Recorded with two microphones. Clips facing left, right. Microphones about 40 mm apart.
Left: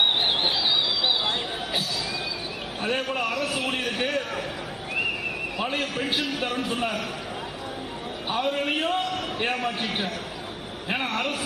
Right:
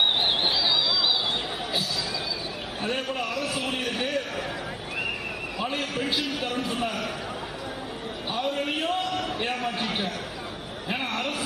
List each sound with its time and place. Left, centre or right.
0.2 s a sound: left
2.8 s a man's voice: left
5.7 s a man's voice: left
8.3 s a man's voice: left